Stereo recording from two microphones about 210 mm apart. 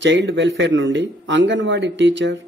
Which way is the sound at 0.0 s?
60° right (ahead or behind).